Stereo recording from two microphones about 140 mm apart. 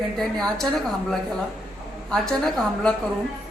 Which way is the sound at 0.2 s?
Centre (ahead or behind).